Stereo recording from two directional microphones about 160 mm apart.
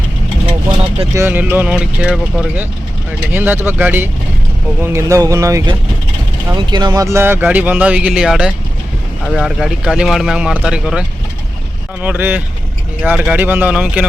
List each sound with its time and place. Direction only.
1.1 s speech: 15° right (ahead or behind)
12.0 s speech: 10° right (ahead or behind)